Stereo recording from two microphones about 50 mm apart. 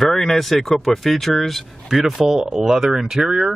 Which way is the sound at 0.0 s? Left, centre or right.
Centre.